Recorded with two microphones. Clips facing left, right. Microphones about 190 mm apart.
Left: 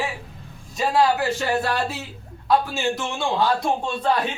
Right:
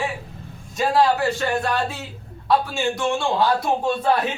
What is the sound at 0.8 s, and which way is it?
A man's voice, 5° left (ahead or behind).